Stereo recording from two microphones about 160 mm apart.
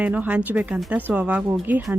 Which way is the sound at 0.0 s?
10° right (ahead or behind).